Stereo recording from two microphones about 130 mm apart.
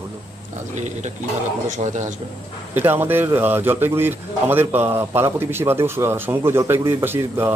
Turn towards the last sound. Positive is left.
turn(degrees=-15)  # may be behind; listen again after turning